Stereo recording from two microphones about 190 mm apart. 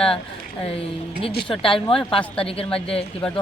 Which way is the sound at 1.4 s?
30° left (ahead or behind).